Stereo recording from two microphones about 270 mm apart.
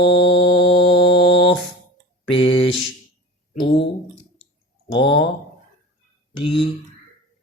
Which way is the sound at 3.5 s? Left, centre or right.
Left.